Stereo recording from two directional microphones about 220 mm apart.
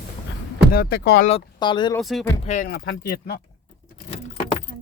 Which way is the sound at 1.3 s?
25° left (ahead or behind).